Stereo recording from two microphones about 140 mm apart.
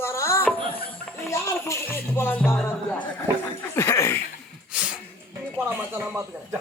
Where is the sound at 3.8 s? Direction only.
20° left (ahead or behind).